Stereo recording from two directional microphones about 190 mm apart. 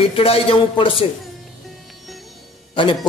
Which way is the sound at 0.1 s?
30° left (ahead or behind).